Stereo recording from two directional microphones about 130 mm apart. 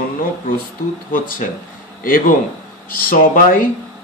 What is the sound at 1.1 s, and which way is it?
Speech, 90° left.